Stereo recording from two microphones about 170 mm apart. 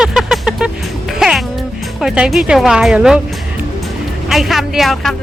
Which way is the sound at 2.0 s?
5° right (ahead or behind).